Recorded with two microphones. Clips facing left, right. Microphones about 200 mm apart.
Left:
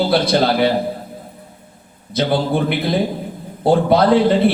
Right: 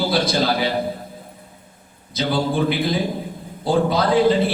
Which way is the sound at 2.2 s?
60° left (ahead or behind).